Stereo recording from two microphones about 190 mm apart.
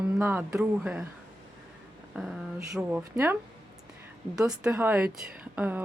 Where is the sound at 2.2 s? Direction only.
5° right (ahead or behind).